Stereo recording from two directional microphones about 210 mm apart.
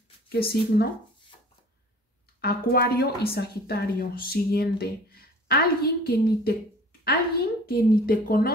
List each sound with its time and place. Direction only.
0.3 s a woman's voice: 45° left (ahead or behind)
2.4 s a woman's voice: 45° left (ahead or behind)